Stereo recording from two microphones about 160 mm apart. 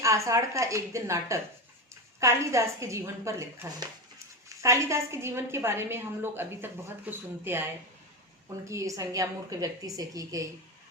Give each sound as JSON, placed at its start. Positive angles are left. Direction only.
{"t": 0.0, "sound": "a woman's voice", "side_deg": -20}